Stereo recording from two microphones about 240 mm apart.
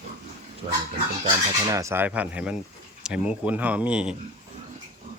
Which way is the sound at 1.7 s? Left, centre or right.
Centre.